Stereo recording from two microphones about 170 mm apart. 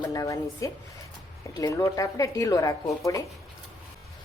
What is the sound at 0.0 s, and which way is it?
Speech, 20° left (ahead or behind).